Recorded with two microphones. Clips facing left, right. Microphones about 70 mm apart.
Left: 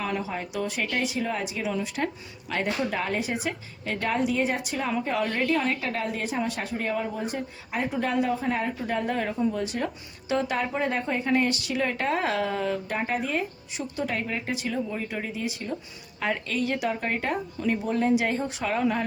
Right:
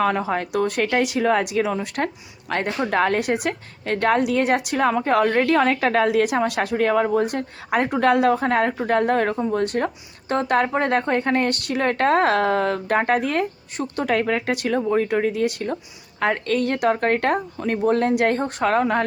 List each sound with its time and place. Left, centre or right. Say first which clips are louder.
0.0 s a woman's voice: right 9 dB; right
2.0 s speech: right 4 dB; right
2.9 s speech: right 8 dB; right
5.5 s a woman's voice: right 8 dB; right
8.9 s speech: right 9 dB; right
13.7 s speech: right 8 dB; right